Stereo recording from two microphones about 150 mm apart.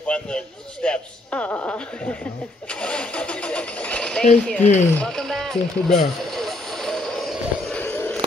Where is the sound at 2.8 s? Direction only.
5° left (ahead or behind).